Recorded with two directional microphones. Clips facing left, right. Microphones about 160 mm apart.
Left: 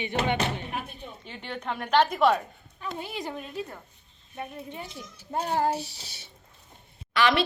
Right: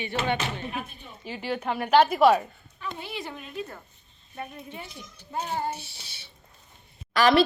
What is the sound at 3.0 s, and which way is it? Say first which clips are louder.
Speech: left 5 dB; 40° left (ahead or behind).